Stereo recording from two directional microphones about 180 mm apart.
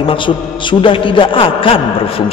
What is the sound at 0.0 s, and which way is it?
A man's voice, 30° left (ahead or behind).